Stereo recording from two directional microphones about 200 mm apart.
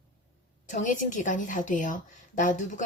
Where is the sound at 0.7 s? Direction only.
40° left (ahead or behind).